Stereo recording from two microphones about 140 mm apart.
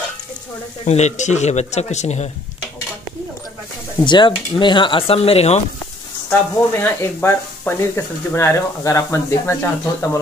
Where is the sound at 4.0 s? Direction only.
35° left (ahead or behind).